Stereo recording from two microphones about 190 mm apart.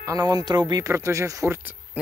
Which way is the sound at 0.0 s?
20° right (ahead or behind).